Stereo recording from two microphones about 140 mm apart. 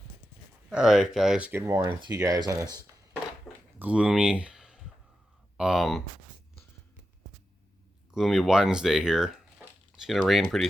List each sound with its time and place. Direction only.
0.7 s speech: 5° right (ahead or behind); by 1.9 s 20° right (ahead or behind)
1.9 s speech: 30° right (ahead or behind)
3.8 s speech: 10° right (ahead or behind)
8.1 s speech: centre (ahead or behind)